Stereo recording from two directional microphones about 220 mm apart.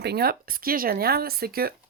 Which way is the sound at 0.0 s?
45° right (ahead or behind).